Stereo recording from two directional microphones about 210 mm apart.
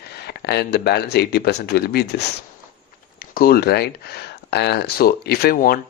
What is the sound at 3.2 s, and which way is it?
Speech, 45° left (ahead or behind).